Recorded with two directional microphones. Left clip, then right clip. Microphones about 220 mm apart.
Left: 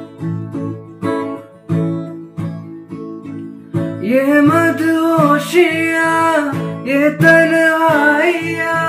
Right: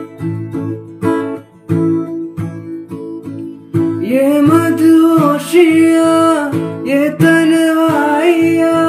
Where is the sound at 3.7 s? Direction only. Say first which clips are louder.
Right 3 dB; 45° right (ahead or behind).